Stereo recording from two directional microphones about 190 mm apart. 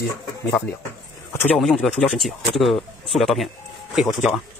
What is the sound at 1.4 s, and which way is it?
A man's voice, 5° left (ahead or behind).